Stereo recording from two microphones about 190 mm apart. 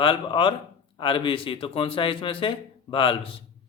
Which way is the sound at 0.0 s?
25° left (ahead or behind).